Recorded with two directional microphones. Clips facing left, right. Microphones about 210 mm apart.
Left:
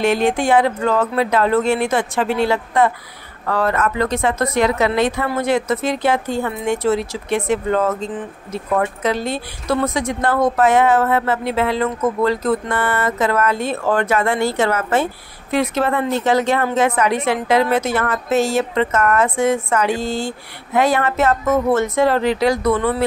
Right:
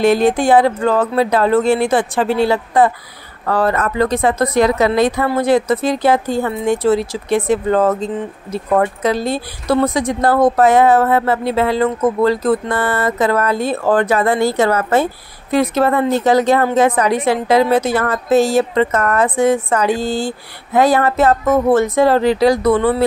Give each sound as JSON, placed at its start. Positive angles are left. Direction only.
{"t": 0.0, "sound": "a woman's voice", "side_deg": -35}